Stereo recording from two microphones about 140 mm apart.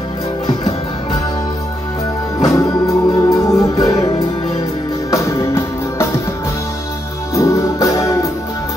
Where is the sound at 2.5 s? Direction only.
25° left (ahead or behind).